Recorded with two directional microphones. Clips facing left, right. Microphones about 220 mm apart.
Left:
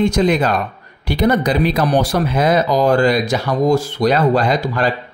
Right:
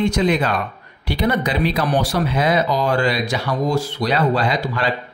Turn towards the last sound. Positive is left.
turn(degrees=45)  # may be behind; listen again after turning